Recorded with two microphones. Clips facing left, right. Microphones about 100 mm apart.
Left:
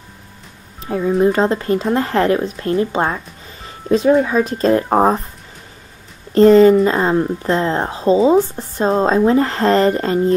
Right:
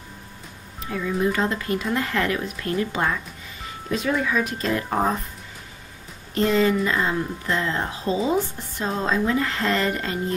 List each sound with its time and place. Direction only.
0.8 s speech: 35° left (ahead or behind)
6.3 s speech: 40° left (ahead or behind)